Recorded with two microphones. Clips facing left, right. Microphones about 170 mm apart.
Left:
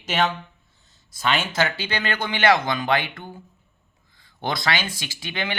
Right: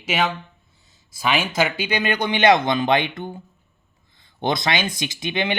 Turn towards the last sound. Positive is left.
turn(degrees=-20)  # may be behind; listen again after turning